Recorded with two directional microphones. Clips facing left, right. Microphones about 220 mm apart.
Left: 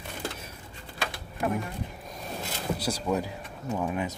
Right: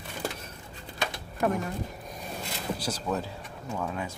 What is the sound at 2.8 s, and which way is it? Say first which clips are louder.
Speech: left 4 dB; 10° left (ahead or behind).